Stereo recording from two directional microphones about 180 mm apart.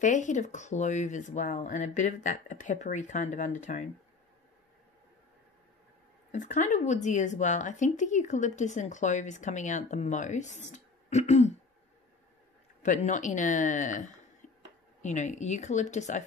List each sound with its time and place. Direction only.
0.0 s speech: 45° left (ahead or behind)
6.3 s speech: 45° left (ahead or behind)
12.8 s speech: 45° left (ahead or behind)